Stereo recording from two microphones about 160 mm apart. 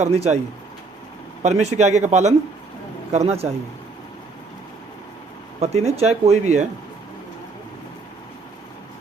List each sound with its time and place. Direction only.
0.0 s speech: 45° right (ahead or behind)
1.4 s speech: 45° right (ahead or behind)
5.5 s speech: 40° right (ahead or behind)